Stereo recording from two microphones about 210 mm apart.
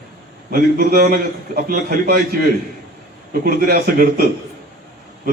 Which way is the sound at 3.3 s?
45° right (ahead or behind).